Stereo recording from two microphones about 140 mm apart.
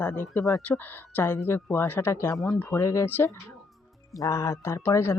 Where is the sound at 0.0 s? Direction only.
15° left (ahead or behind).